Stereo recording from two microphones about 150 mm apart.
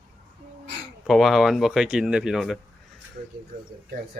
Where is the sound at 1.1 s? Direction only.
Centre (ahead or behind).